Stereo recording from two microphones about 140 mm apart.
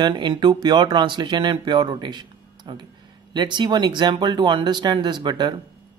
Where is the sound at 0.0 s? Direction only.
35° right (ahead or behind).